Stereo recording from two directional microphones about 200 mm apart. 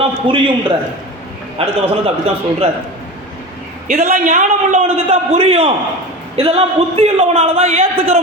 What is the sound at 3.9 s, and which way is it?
A man's voice, 35° right (ahead or behind).